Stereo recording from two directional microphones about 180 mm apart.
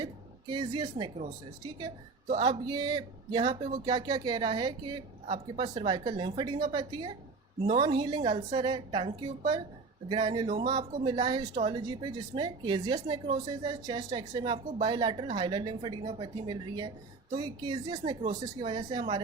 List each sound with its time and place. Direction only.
0.0 s a woman's voice: 25° right (ahead or behind)
2.4 s speech: 25° right (ahead or behind)